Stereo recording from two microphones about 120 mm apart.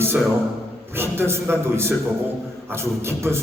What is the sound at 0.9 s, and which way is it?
A man's voice, 20° right (ahead or behind).